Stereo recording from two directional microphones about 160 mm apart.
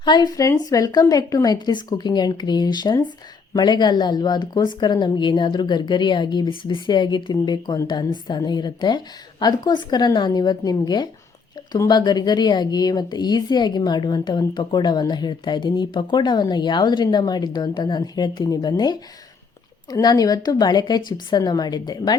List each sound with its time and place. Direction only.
0.0 s speech: 25° left (ahead or behind)